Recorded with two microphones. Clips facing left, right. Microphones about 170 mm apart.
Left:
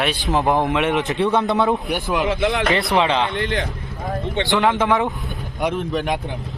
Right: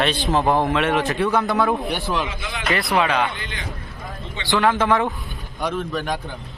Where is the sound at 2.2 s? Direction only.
65° left (ahead or behind).